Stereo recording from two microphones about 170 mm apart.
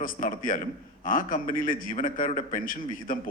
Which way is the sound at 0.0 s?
55° left (ahead or behind).